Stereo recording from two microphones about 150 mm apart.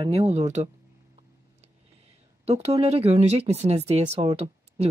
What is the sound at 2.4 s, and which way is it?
Speech, 40° right (ahead or behind).